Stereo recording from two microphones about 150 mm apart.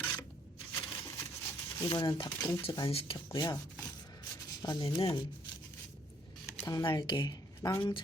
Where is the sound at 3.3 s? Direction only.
25° left (ahead or behind).